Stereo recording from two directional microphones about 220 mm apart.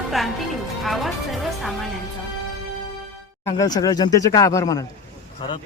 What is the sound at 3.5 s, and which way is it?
Speech, 20° left (ahead or behind).